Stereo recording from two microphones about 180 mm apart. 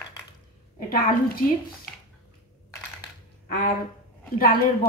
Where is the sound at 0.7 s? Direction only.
55° left (ahead or behind).